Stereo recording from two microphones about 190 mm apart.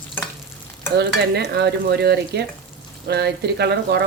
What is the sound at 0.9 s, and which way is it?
Speech, 60° right (ahead or behind).